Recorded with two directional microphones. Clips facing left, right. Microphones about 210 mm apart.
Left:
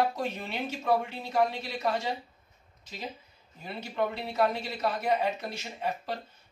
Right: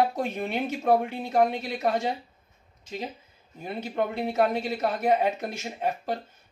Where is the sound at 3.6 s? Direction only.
50° right (ahead or behind).